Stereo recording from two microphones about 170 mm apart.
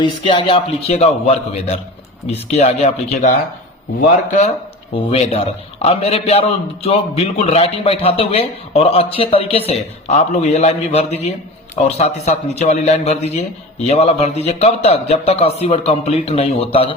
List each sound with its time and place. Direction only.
0.0 s a man's voice: 30° left (ahead or behind)